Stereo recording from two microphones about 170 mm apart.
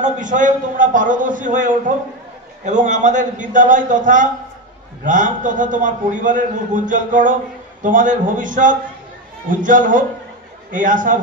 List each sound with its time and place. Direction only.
0.0 s a man's voice: 50° right (ahead or behind)